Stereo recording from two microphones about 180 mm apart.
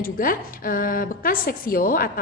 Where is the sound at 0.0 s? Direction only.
50° left (ahead or behind).